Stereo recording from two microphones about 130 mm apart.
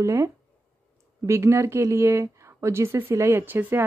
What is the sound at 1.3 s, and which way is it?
Speech, 20° right (ahead or behind).